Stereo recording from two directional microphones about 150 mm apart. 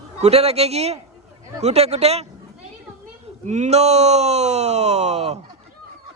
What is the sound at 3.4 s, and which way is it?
Speech, 50° right (ahead or behind).